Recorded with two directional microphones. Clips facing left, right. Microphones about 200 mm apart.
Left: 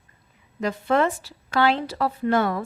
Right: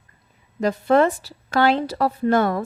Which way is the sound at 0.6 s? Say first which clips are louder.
Right 4 dB; 40° right (ahead or behind).